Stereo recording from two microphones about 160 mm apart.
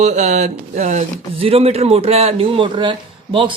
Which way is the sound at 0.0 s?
45° right (ahead or behind).